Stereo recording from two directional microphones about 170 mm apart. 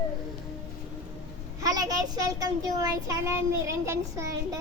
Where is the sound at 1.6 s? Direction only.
20° right (ahead or behind).